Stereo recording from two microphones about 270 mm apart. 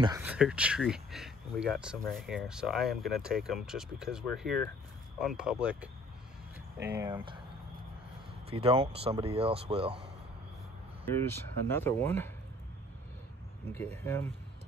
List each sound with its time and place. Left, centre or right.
0.0 s speech: centre
7.0 s speech: centre
8.5 s speech: centre
11.1 s speech: centre
13.7 s speech: centre